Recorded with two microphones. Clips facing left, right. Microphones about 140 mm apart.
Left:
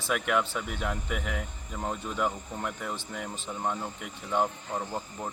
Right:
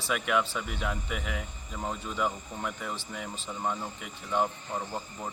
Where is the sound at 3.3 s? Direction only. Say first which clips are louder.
Left 1 dB; 15° left (ahead or behind).